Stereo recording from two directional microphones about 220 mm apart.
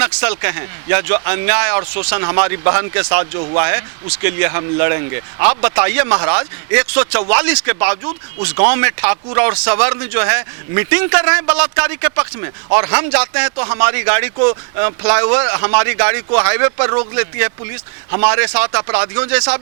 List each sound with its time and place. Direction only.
0.0 s speech: 10° right (ahead or behind)